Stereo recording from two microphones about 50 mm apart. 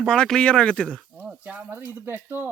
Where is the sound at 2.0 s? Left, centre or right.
Right.